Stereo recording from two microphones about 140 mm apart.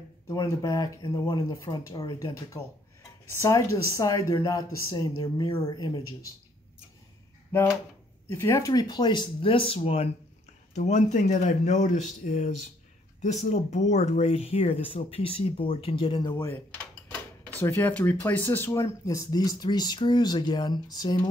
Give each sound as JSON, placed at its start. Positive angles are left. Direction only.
{"t": 0.3, "sound": "speech", "side_deg": 25}
{"t": 8.3, "sound": "speech", "side_deg": 20}
{"t": 10.7, "sound": "speech", "side_deg": 60}
{"t": 17.6, "sound": "speech", "side_deg": 15}